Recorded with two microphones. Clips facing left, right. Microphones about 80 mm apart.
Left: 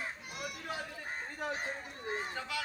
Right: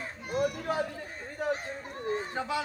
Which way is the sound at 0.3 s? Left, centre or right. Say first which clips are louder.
Right 12 dB; right.